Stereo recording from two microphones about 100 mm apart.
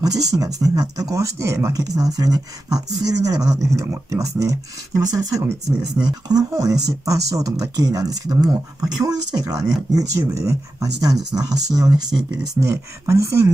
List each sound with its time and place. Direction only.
0.0 s speech: 40° right (ahead or behind)
12.7 s speech: 30° right (ahead or behind)